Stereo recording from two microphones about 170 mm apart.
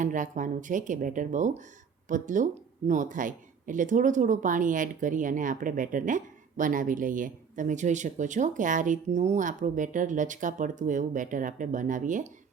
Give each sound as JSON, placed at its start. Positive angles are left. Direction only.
{"t": 0.0, "sound": "speech", "side_deg": -50}